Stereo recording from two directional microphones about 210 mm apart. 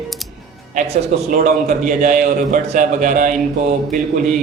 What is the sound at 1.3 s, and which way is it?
A man's voice, 40° right (ahead or behind).